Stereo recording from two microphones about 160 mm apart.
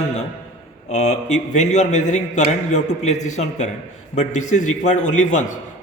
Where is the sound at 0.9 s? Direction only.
45° left (ahead or behind).